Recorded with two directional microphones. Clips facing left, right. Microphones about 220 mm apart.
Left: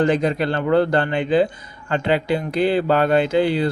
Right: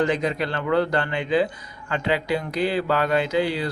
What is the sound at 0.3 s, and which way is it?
A man's voice, 30° left (ahead or behind).